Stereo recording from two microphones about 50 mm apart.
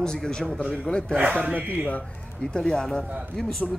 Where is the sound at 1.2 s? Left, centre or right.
Right.